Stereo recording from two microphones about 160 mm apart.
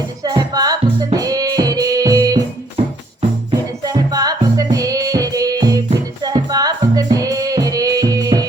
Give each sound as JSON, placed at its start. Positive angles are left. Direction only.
{"t": 0.3, "sound": "music", "side_deg": -25}
{"t": 3.8, "sound": "music", "side_deg": -25}